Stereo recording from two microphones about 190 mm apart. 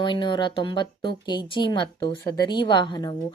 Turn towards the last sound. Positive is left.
turn(degrees=20)  # may be behind; listen again after turning